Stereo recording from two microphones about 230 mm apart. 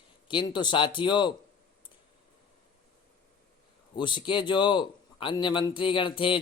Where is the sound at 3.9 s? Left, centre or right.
Left.